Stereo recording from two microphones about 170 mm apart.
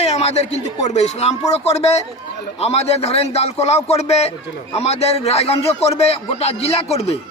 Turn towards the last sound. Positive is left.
turn(degrees=40)  # may be behind; listen again after turning